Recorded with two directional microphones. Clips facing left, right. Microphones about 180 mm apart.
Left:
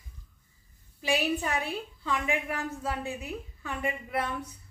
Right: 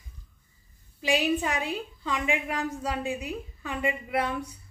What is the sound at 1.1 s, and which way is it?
A woman's voice, 15° right (ahead or behind).